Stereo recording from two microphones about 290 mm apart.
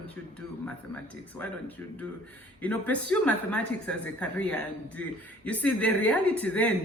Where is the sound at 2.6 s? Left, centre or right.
Centre.